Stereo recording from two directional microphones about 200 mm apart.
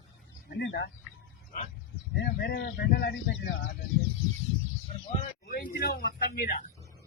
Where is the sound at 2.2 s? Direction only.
55° left (ahead or behind).